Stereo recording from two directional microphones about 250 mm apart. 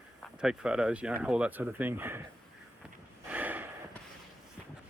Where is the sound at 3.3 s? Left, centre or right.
Centre.